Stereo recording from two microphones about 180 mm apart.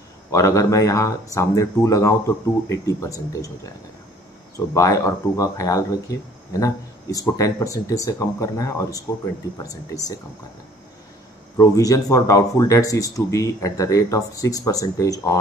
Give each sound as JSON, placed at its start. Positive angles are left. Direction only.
{"t": 0.3, "sound": "speech", "side_deg": 15}
{"t": 4.7, "sound": "speech", "side_deg": 15}
{"t": 11.5, "sound": "speech", "side_deg": 20}